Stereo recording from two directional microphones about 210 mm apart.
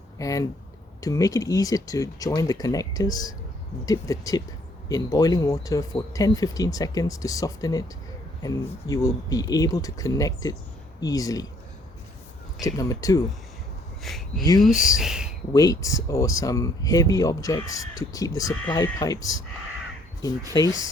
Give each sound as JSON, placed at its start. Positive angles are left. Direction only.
{"t": 0.2, "sound": "speech", "side_deg": 15}
{"t": 12.6, "sound": "speech", "side_deg": 15}
{"t": 14.0, "sound": "speech", "side_deg": 0}
{"t": 15.5, "sound": "speech", "side_deg": 15}
{"t": 20.5, "sound": "speech", "side_deg": 15}